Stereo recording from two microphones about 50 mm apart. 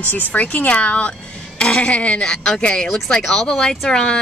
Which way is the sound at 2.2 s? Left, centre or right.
Centre.